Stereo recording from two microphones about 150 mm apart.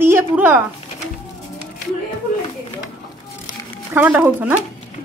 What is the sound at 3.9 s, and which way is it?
Speech, 10° right (ahead or behind).